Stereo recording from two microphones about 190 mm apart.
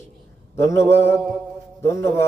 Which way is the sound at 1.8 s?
15° left (ahead or behind).